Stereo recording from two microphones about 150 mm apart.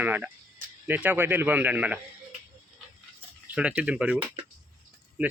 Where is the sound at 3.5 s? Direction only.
5° right (ahead or behind).